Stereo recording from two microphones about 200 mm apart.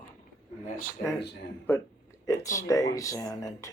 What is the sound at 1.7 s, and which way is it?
Speech, 10° left (ahead or behind).